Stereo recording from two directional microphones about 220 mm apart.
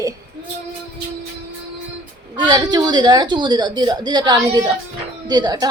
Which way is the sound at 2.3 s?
15° right (ahead or behind).